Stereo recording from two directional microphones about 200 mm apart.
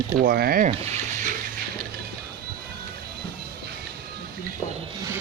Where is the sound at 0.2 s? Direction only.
50° right (ahead or behind).